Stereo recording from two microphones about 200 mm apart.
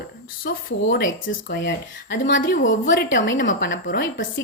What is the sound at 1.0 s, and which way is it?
A woman's voice, 70° left (ahead or behind).